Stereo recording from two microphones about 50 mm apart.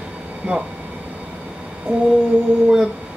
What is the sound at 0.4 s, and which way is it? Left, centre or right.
Speech, right.